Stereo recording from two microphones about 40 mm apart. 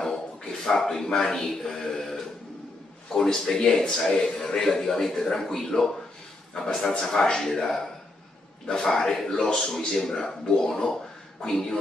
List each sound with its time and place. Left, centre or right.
0.0 s a man's voice: centre